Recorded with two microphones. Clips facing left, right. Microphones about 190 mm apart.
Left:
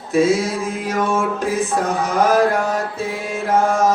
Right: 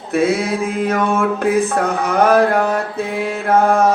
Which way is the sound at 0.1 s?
60° right (ahead or behind).